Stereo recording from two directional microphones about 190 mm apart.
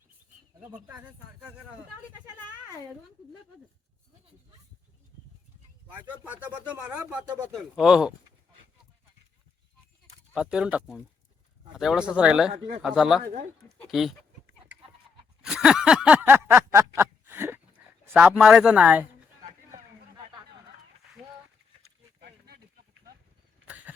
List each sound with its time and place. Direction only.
0.6 s speech: 10° right (ahead or behind)
6.2 s speech: 5° right (ahead or behind)
10.3 s speech: 5° right (ahead or behind)
13.2 s speech: 50° right (ahead or behind)
13.9 s speech: centre (ahead or behind)
15.4 s snicker: 5° right (ahead or behind)
16.7 s a sound: 15° right (ahead or behind)
18.0 s speech: 10° right (ahead or behind)
23.6 s a sound: 10° right (ahead or behind)